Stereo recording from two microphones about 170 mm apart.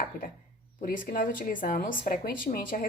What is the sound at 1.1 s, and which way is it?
A woman's voice, 55° left (ahead or behind).